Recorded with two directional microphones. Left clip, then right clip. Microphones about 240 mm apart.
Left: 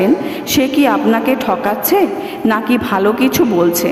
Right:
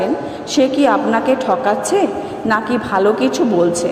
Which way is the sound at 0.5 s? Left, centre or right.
Left.